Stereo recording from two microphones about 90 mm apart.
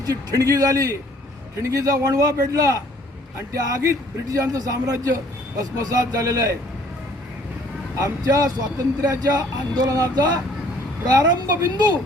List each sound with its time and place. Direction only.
0.1 s a man's voice: 40° right (ahead or behind)
7.9 s a man's voice: 40° right (ahead or behind)